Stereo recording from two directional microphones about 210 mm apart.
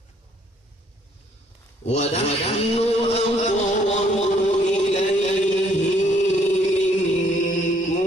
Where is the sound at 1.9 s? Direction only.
30° left (ahead or behind).